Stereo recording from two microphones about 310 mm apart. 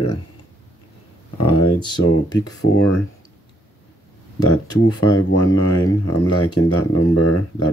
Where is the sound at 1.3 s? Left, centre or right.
Left.